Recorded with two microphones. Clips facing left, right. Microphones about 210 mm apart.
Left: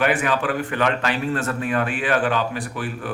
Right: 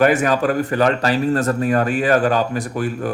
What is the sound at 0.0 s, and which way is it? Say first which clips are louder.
A man's voice: right 6 dB; 40° right (ahead or behind).